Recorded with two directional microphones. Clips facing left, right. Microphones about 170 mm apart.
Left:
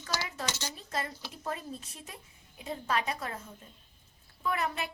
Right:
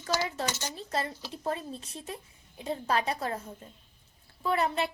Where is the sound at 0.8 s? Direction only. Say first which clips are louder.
Right 4 dB; 30° right (ahead or behind).